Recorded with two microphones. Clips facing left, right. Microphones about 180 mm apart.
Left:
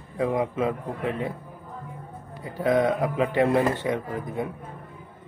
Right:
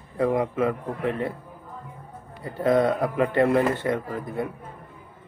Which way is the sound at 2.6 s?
15° left (ahead or behind).